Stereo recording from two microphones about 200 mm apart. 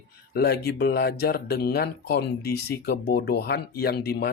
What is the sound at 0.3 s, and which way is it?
Speech, 55° left (ahead or behind).